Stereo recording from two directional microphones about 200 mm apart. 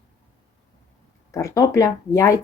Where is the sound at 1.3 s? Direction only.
15° left (ahead or behind).